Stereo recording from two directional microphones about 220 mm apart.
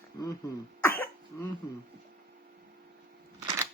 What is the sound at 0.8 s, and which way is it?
Cough, 10° left (ahead or behind).